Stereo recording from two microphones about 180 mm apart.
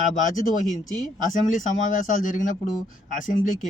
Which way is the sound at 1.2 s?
45° left (ahead or behind).